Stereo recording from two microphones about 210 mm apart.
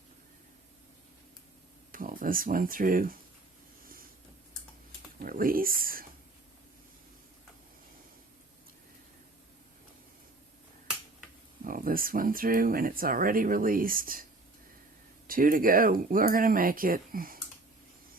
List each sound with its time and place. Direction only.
1.9 s speech: 40° right (ahead or behind)
5.2 s a sound: 40° right (ahead or behind)
11.6 s speech: 40° right (ahead or behind)
15.3 s speech: 40° right (ahead or behind)